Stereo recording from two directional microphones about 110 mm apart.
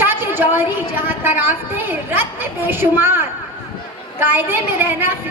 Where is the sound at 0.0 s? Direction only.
20° right (ahead or behind).